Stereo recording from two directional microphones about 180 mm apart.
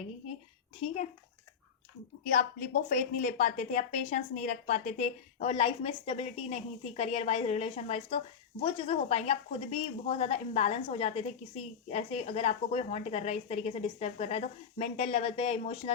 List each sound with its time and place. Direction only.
2.3 s a woman's voice: 50° left (ahead or behind)